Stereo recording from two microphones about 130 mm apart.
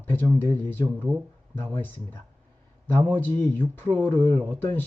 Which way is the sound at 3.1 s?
15° left (ahead or behind).